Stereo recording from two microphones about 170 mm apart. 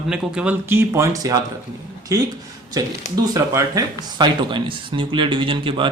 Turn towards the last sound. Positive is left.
turn(degrees=-30)  # may be behind; listen again after turning